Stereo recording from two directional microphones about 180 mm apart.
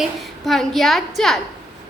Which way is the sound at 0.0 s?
Centre (ahead or behind).